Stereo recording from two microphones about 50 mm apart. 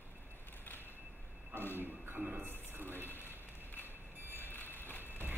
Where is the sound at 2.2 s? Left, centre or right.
Centre.